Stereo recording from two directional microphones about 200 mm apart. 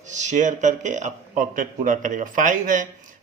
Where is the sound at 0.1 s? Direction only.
35° right (ahead or behind).